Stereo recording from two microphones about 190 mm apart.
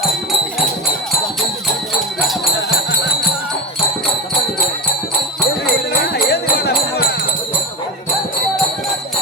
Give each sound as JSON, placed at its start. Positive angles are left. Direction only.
{"t": 6.1, "sound": "music", "side_deg": 55}